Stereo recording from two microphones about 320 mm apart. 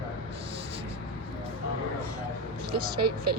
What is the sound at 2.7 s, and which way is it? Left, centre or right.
Speech, right.